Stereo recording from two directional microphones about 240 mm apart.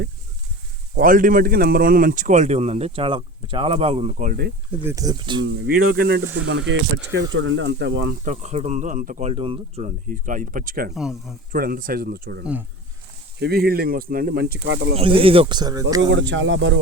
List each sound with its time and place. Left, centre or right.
0.9 s speech: right
4.8 s speech: centre
5.4 s speech: right
8.2 s speech: right
10.9 s speech: centre
11.5 s speech: right
14.9 s speech: right
16.0 s speech: right